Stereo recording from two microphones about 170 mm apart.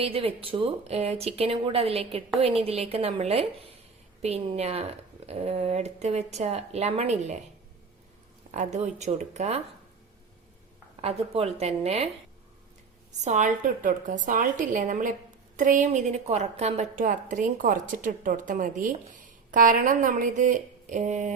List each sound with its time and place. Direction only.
0.0 s speech: 35° right (ahead or behind)
8.5 s a woman's voice: 45° right (ahead or behind)
11.0 s speech: 35° right (ahead or behind)
13.2 s a woman's voice: 45° right (ahead or behind)